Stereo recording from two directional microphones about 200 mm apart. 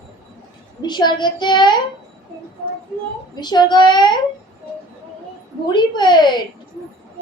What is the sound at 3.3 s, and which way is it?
Speech, 20° left (ahead or behind).